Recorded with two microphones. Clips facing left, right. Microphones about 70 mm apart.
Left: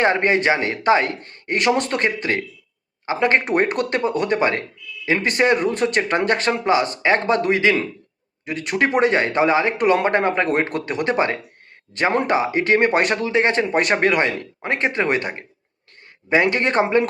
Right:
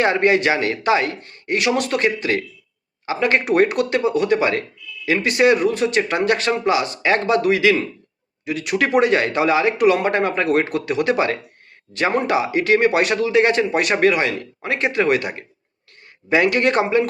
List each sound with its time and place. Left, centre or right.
0.0 s speech: left